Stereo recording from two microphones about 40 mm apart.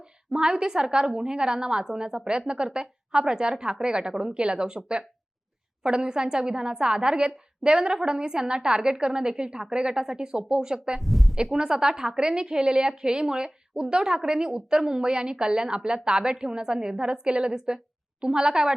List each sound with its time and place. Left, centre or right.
0.3 s a woman's voice: right
11.0 s a woman's voice: centre
11.5 s a woman's voice: centre